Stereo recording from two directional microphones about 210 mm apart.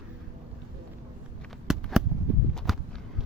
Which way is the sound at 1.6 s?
Centre (ahead or behind).